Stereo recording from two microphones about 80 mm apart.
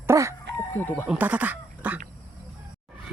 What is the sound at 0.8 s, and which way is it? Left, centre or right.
Speech, left.